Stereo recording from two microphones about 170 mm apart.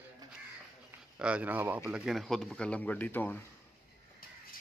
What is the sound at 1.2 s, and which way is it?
Speech, 10° right (ahead or behind).